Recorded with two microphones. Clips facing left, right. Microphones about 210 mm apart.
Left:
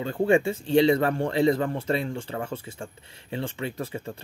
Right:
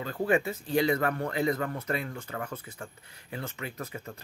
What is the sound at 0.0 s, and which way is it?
Speech, 25° left (ahead or behind).